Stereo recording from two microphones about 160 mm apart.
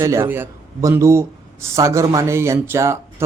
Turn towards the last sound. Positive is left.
turn(degrees=-15)  # may be behind; listen again after turning